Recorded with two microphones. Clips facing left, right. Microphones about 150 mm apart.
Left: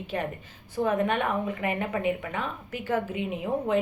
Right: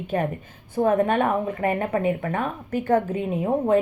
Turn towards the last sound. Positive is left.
turn(degrees=-45)  # may be behind; listen again after turning